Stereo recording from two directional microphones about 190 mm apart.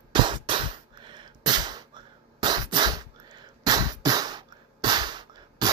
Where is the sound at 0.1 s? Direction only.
25° right (ahead or behind).